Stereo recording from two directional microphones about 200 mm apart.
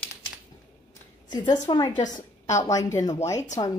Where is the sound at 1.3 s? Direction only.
20° left (ahead or behind).